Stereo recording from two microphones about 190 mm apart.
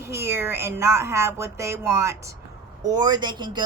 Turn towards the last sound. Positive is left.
turn(degrees=-25)  # may be behind; listen again after turning